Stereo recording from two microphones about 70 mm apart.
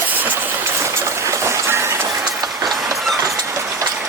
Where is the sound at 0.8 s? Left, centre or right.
Right.